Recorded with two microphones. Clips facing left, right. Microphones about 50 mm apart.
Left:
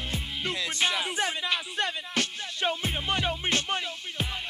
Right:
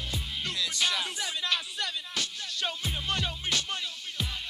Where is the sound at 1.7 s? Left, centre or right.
Left.